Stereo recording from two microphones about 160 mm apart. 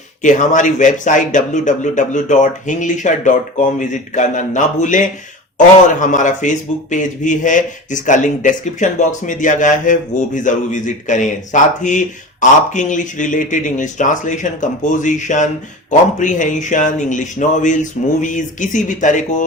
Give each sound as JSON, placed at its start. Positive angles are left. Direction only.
{"t": 0.2, "sound": "speech", "side_deg": 50}